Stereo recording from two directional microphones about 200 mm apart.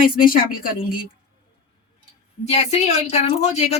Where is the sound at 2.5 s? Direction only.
35° left (ahead or behind).